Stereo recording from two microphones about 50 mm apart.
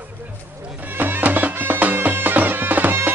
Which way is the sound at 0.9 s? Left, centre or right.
Right.